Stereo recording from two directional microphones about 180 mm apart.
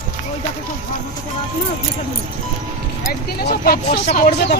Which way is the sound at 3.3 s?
60° left (ahead or behind).